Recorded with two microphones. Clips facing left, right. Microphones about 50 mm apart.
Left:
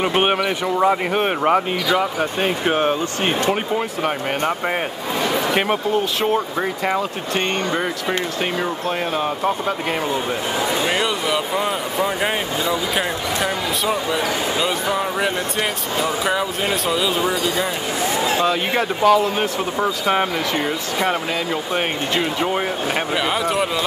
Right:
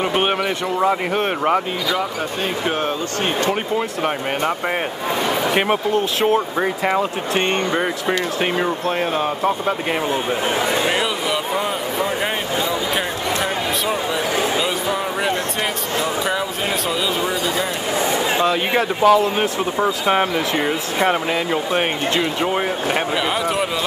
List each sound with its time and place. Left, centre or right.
0.0 s speech: centre
5.5 s speech: centre
12.6 s a sound: centre
14.6 s speech: centre
18.4 s speech: centre
22.1 s speech: centre